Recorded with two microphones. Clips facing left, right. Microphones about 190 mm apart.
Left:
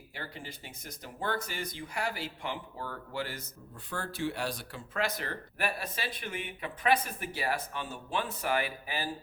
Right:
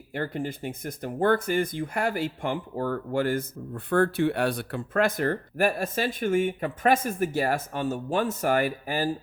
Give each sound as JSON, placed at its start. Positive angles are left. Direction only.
{"t": 0.1, "sound": "speech", "side_deg": -50}